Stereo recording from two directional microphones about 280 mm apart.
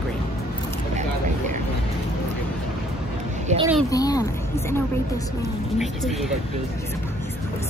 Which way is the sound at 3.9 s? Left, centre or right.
Centre.